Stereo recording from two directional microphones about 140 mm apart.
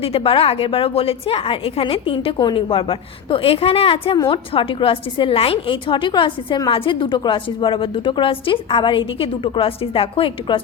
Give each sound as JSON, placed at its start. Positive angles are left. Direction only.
{"t": 0.0, "sound": "a woman's voice", "side_deg": 40}